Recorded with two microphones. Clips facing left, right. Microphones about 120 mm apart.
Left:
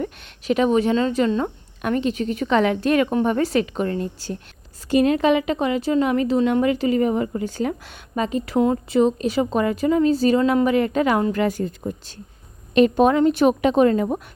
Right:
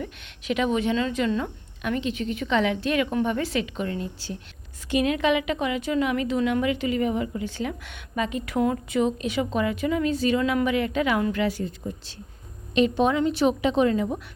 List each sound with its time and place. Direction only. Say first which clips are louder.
0.0 s a woman's voice: left 6 dB; 40° left (ahead or behind)